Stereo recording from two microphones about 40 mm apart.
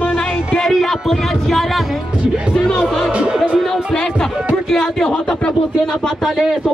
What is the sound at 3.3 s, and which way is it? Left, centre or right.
Speech, right.